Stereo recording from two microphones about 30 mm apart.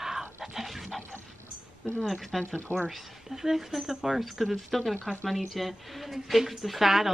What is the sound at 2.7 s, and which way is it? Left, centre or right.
Speech, right.